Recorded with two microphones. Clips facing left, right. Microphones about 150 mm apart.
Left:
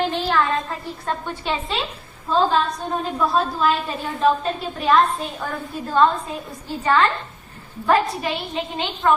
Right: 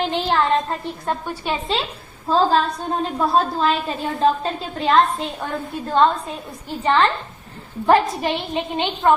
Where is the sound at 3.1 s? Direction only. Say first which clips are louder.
Right 2 dB; 30° right (ahead or behind).